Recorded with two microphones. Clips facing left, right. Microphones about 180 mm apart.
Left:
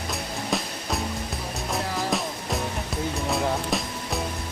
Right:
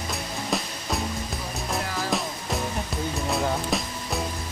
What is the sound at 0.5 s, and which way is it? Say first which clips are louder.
Music: even; centre (ahead or behind).